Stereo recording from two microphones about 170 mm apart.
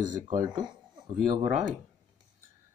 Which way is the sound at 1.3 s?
35° right (ahead or behind).